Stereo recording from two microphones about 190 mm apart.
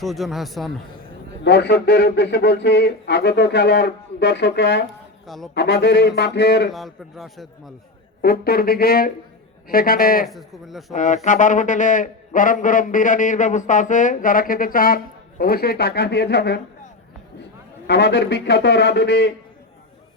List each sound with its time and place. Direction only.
0.0 s speech: centre (ahead or behind)
1.5 s speech: 60° left (ahead or behind)
5.2 s speech: centre (ahead or behind)
5.5 s speech: 65° left (ahead or behind)
6.7 s speech: centre (ahead or behind)
8.2 s a man's voice: 55° left (ahead or behind)
10.2 s speech: centre (ahead or behind)
10.9 s a man's voice: 40° left (ahead or behind); by 16.6 s 60° left (ahead or behind)
17.8 s speech: 65° left (ahead or behind)